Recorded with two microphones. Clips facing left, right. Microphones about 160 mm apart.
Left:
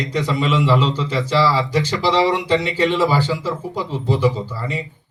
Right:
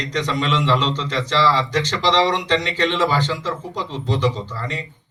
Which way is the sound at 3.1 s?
40° left (ahead or behind).